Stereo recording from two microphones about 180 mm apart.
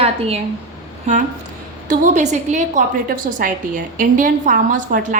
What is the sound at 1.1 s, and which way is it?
A woman's voice, 40° right (ahead or behind).